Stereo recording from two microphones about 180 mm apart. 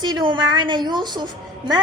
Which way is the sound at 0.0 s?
25° right (ahead or behind).